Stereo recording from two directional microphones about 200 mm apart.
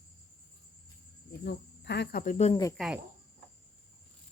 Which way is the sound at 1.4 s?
60° left (ahead or behind).